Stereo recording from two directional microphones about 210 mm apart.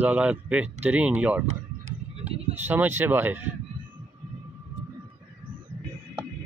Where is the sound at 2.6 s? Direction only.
10° right (ahead or behind).